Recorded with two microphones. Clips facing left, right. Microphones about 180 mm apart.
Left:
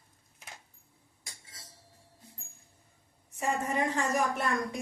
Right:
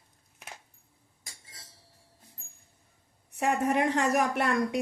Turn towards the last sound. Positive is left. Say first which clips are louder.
# right 4 dB
turn(degrees=-65)  # may be behind; listen again after turning